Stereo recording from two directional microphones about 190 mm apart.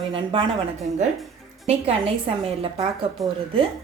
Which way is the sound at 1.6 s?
30° right (ahead or behind).